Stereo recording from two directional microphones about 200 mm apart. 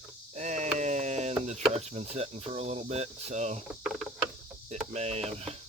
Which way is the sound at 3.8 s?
Centre (ahead or behind).